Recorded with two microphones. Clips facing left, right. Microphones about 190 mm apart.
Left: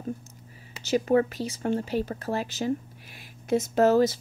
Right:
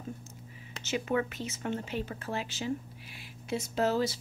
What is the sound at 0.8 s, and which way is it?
Speech, 40° left (ahead or behind).